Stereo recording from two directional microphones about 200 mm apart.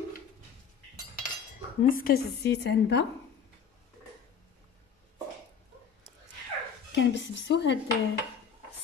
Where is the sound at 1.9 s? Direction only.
45° left (ahead or behind).